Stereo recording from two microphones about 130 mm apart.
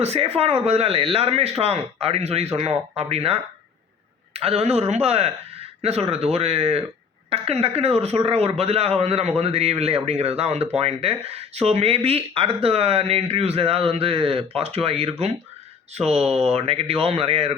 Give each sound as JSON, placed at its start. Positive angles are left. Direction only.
{"t": 0.0, "sound": "speech", "side_deg": -50}